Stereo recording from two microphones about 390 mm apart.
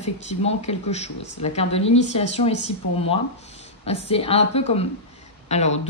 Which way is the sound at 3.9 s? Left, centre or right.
Centre.